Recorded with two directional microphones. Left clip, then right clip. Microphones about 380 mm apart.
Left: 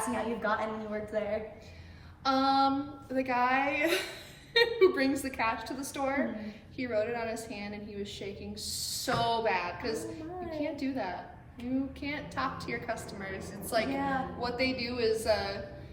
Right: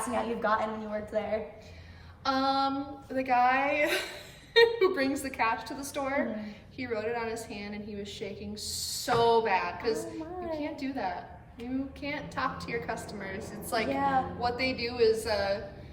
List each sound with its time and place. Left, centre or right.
0.1 s a woman's voice: centre